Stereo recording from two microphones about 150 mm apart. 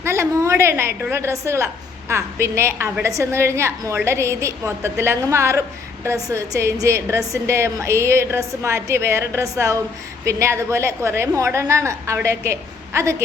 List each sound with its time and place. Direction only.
0.0 s a woman's voice: 20° right (ahead or behind)